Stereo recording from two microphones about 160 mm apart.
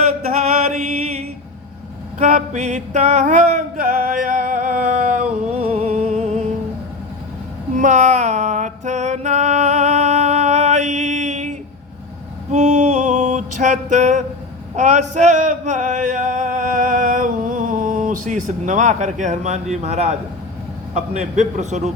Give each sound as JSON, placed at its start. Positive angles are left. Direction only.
{"t": 0.7, "sound": "chant", "side_deg": -45}
{"t": 2.1, "sound": "music", "side_deg": -50}
{"t": 7.8, "sound": "music", "side_deg": -50}
{"t": 12.5, "sound": "a sound", "side_deg": -45}
{"t": 14.8, "sound": "male singing", "side_deg": -50}
{"t": 19.7, "sound": "a man's voice", "side_deg": -40}